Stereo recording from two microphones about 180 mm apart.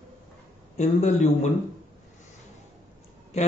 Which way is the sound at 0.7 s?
40° left (ahead or behind).